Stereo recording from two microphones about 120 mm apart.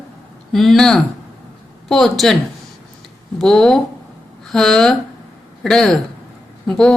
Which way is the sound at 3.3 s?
5° left (ahead or behind).